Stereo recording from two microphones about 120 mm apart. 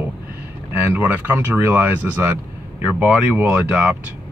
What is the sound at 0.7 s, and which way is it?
Speech, 15° right (ahead or behind).